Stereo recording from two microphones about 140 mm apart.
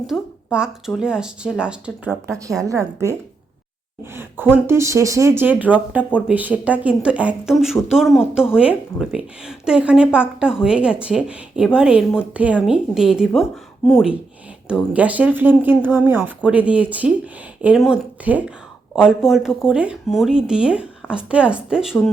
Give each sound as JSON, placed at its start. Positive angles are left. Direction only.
{"t": 0.1, "sound": "a woman's voice", "side_deg": -5}
{"t": 2.6, "sound": "a woman's voice", "side_deg": -20}